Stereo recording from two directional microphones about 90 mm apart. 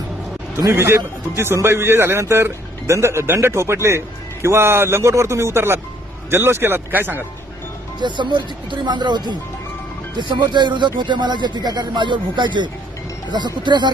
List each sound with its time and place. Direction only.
0.6 s a man's voice: 30° right (ahead or behind)
7.9 s speech: 55° right (ahead or behind)